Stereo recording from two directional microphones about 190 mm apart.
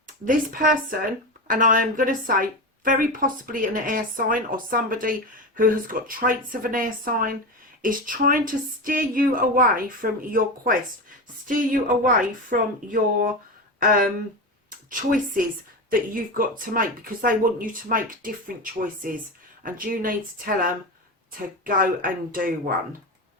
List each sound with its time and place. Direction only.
0.3 s a woman's voice: 45° right (ahead or behind)